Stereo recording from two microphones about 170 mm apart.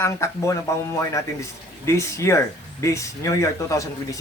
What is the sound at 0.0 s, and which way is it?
Speech, 15° left (ahead or behind).